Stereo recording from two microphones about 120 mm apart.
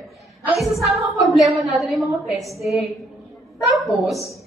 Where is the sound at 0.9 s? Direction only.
Centre (ahead or behind).